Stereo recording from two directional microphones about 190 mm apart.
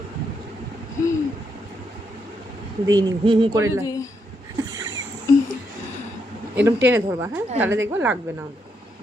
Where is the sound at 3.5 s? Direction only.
15° right (ahead or behind).